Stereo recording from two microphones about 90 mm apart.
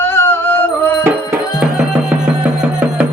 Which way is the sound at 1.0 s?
25° right (ahead or behind).